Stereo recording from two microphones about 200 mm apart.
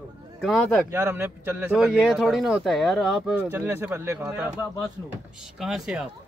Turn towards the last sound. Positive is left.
turn(degrees=-5)  # may be behind; listen again after turning